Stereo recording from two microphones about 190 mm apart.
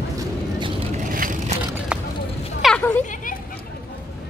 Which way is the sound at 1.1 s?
45° right (ahead or behind).